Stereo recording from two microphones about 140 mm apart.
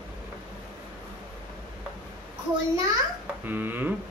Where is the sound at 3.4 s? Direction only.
15° right (ahead or behind).